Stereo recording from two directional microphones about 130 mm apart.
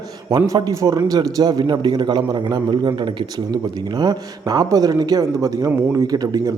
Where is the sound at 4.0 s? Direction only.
30° right (ahead or behind).